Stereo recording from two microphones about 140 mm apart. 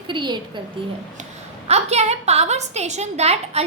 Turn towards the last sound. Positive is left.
turn(degrees=-50)  # may be behind; listen again after turning